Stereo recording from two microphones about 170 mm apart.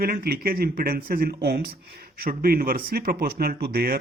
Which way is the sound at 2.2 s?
60° right (ahead or behind).